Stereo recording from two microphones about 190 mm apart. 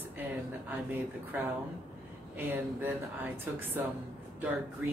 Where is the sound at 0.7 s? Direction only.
10° right (ahead or behind).